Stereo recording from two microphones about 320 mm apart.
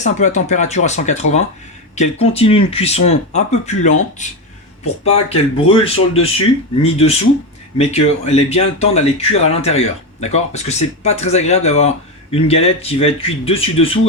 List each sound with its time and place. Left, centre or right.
0.0 s speech: left